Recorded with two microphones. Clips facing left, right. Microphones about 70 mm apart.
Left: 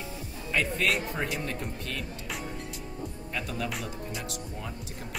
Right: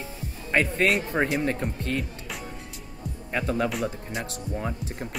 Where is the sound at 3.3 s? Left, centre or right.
Right.